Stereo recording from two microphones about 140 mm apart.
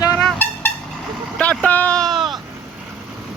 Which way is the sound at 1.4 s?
10° left (ahead or behind).